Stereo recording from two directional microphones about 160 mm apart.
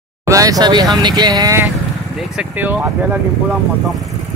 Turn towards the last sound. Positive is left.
turn(degrees=0)  # may be behind; listen again after turning